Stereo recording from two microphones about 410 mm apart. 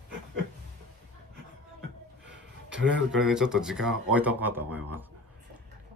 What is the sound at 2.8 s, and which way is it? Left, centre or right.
Speech, right.